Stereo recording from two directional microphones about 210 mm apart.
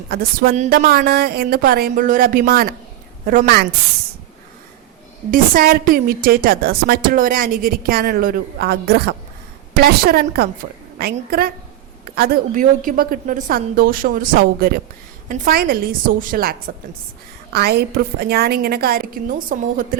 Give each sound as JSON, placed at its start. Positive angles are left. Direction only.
{"t": 0.1, "sound": "a woman's voice", "side_deg": -45}
{"t": 0.9, "sound": "a woman's voice", "side_deg": -45}
{"t": 5.3, "sound": "a woman's voice", "side_deg": -45}